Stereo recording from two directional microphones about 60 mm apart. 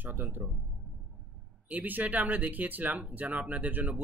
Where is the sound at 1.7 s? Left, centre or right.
Right.